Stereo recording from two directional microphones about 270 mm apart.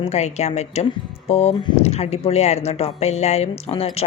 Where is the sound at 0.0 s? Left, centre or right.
Left.